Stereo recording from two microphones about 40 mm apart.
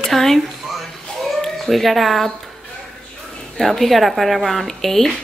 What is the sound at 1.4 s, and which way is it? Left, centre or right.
Speech, centre.